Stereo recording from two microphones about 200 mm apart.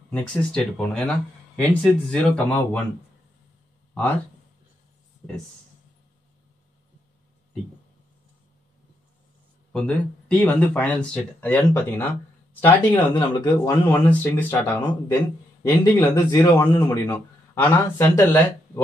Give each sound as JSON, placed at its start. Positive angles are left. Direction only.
{"t": 0.1, "sound": "a man's voice", "side_deg": 5}
{"t": 9.7, "sound": "a man's voice", "side_deg": 5}
{"t": 12.9, "sound": "a man's voice", "side_deg": 20}